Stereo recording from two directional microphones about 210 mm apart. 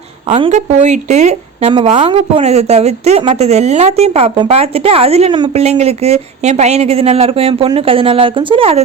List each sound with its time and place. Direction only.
0.3 s a woman's voice: 30° right (ahead or behind)